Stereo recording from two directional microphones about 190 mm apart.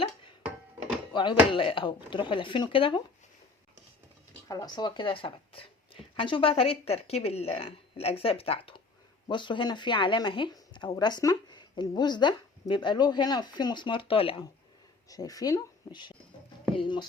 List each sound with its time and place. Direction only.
1.1 s speech: 25° left (ahead or behind)
4.4 s speech: 20° left (ahead or behind)